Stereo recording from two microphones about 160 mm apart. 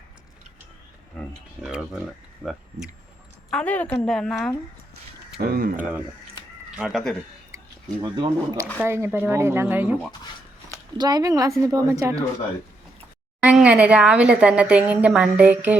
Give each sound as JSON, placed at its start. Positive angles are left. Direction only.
{"t": 1.2, "sound": "a sound", "side_deg": 5}
{"t": 1.6, "sound": "speech", "side_deg": -5}
{"t": 3.5, "sound": "a woman's voice", "side_deg": 10}
{"t": 5.4, "sound": "speech", "side_deg": -70}
{"t": 6.7, "sound": "speech", "side_deg": -5}
{"t": 7.5, "sound": "a sound", "side_deg": -20}
{"t": 8.1, "sound": "speech", "side_deg": -25}
{"t": 8.8, "sound": "speech", "side_deg": -15}
{"t": 10.9, "sound": "speech", "side_deg": -25}
{"t": 13.4, "sound": "speech", "side_deg": -10}